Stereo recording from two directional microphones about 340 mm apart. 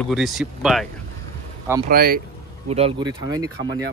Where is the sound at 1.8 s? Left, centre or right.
Right; by 3.5 s centre.